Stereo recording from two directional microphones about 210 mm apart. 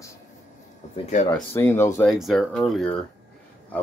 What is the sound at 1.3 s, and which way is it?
Speech, 10° left (ahead or behind).